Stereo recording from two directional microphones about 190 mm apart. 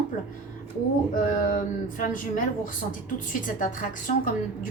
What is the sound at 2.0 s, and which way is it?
A woman's voice, 45° left (ahead or behind).